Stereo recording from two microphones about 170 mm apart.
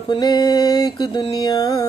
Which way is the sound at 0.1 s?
25° left (ahead or behind).